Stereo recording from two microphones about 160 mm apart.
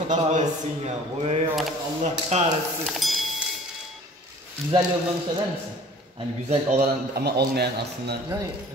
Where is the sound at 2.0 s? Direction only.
45° right (ahead or behind).